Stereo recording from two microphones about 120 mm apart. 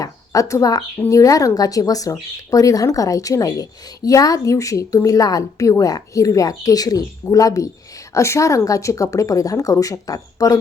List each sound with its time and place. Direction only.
0.0 s speech: 25° left (ahead or behind)